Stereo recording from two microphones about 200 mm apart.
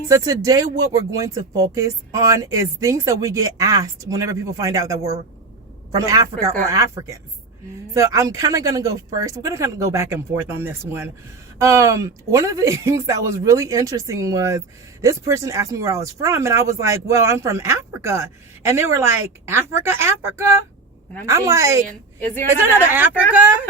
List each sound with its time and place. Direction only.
0.1 s speech: 15° right (ahead or behind)
22.9 s speech: 10° right (ahead or behind)